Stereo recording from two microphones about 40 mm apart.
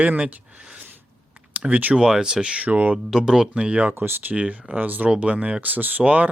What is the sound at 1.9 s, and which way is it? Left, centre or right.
Speech, centre.